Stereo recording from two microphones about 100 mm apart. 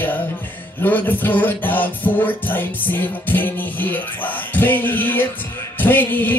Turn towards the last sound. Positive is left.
turn(degrees=20)  # may be behind; listen again after turning